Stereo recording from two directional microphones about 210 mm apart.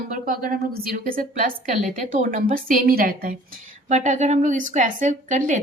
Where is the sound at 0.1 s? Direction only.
40° right (ahead or behind).